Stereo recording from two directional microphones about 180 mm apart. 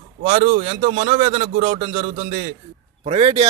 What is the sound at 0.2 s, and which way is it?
A man's voice, 40° right (ahead or behind).